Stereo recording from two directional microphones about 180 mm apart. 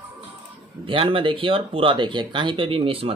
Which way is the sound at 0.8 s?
30° right (ahead or behind).